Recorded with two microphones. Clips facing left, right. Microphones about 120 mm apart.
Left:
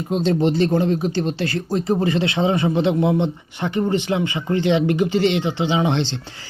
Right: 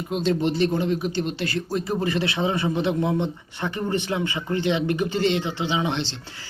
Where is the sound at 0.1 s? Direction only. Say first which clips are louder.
Left 4 dB; 30° left (ahead or behind).